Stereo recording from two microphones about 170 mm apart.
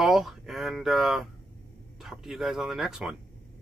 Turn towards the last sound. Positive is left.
turn(degrees=0)  # may be behind; listen again after turning